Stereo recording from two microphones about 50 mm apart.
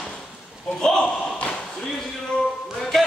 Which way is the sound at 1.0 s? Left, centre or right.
Left.